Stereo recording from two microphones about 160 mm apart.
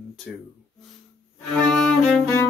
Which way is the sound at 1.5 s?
5° left (ahead or behind).